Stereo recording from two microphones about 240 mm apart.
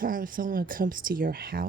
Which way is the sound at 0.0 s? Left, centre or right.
Right.